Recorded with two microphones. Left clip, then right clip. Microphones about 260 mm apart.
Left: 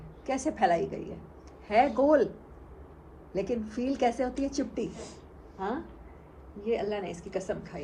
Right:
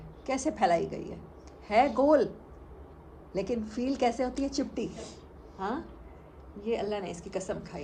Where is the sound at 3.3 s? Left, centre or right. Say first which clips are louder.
Left 1 dB; centre.